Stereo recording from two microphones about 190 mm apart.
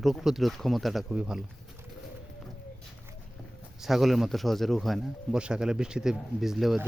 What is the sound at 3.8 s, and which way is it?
Speech, centre (ahead or behind).